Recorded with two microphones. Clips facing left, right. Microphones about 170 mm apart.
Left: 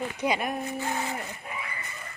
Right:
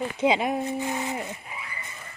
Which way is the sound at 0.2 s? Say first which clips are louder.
Right 6 dB; 20° right (ahead or behind).